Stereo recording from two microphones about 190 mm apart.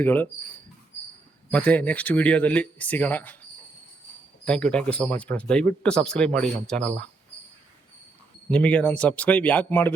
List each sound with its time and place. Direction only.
0.0 s speech: 10° left (ahead or behind)
1.5 s speech: 5° left (ahead or behind)
4.4 s speech: 5° left (ahead or behind)
8.4 s speech: 5° left (ahead or behind)